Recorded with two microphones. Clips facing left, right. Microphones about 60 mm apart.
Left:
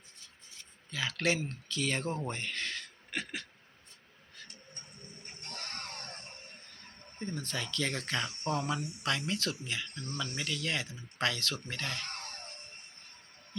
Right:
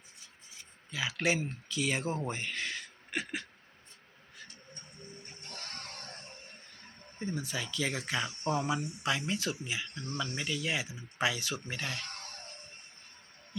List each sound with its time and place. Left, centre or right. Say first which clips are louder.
0.5 s speech: even; centre
5.2 s music: left 5 dB; left
7.2 s speech: right 1 dB; centre
12.1 s music: left 2 dB; left